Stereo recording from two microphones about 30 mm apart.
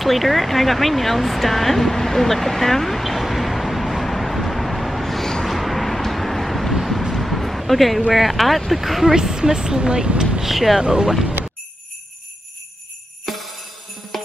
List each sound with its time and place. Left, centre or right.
0.0 s a sound: centre
5.4 s vehicle: centre
8.1 s speech: centre
9.1 s speech: right
10.4 s speech: centre
10.8 s speech: right
13.2 s jingle bell: centre
14.1 s music: centre